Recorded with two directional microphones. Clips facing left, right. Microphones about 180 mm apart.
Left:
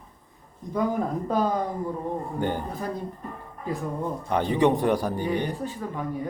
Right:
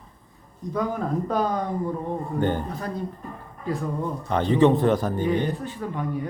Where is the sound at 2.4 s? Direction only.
10° left (ahead or behind).